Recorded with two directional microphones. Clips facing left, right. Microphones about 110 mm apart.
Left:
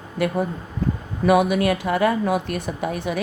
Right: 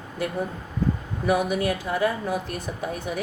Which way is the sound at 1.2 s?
75° left (ahead or behind).